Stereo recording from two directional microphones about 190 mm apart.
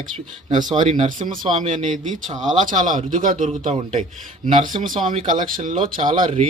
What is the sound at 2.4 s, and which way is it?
Speech, 45° right (ahead or behind).